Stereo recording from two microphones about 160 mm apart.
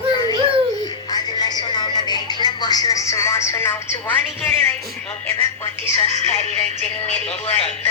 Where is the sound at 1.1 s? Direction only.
25° left (ahead or behind).